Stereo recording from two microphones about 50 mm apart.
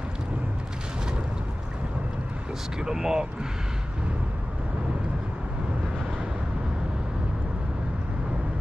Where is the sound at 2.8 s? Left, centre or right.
Centre.